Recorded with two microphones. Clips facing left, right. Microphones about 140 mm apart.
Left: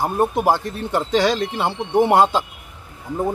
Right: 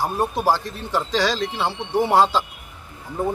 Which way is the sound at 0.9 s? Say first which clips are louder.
Left 3 dB; 55° left (ahead or behind).